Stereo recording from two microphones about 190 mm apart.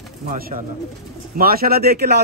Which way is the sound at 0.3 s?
45° right (ahead or behind).